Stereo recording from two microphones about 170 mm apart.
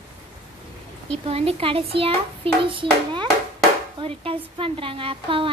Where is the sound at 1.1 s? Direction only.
35° right (ahead or behind).